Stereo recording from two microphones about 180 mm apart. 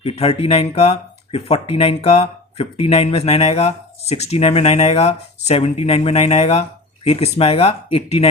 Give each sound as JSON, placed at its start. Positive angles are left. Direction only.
{"t": 0.0, "sound": "speech", "side_deg": 35}